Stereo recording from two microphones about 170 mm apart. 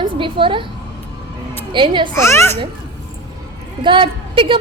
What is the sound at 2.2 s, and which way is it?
Baby laughter, 15° left (ahead or behind).